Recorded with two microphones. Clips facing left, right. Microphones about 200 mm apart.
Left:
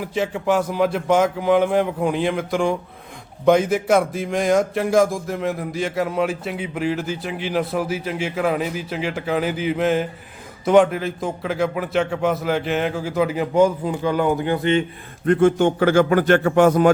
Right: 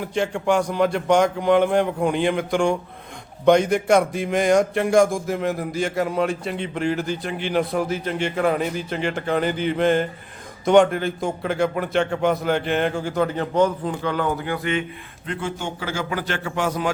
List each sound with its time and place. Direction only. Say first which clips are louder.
0.0 s speech: even; 5° left (ahead or behind); by 14.8 s 30° left (ahead or behind)
15.3 s a man's voice: left 13 dB; 55° left (ahead or behind)